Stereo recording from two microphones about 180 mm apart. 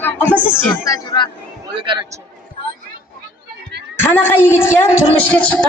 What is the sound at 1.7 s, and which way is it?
Speech, 25° right (ahead or behind).